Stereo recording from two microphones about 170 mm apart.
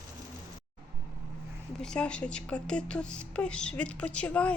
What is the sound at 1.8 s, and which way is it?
Speech, 5° left (ahead or behind).